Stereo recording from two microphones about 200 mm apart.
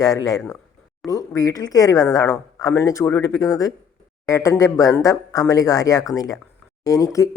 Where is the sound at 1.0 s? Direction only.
15° left (ahead or behind).